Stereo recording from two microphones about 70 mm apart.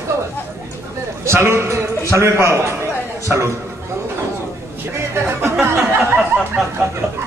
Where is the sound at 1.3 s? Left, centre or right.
Right.